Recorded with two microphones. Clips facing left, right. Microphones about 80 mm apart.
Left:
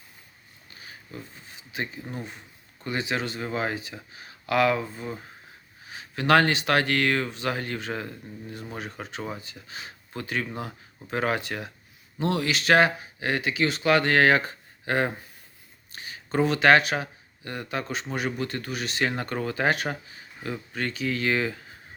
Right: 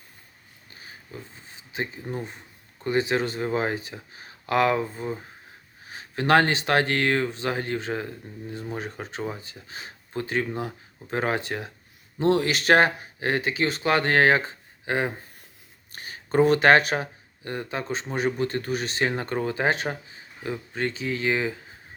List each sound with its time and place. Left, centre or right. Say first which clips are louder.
0.7 s a sound: even; right
1.7 s speech: right 2 dB; right
2.2 s speech: right 2 dB; right; by 15.1 s centre
15.9 s speech: right 3 dB; right